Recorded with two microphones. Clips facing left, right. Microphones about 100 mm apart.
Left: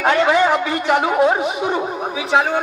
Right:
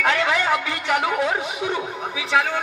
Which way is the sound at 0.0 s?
30° left (ahead or behind).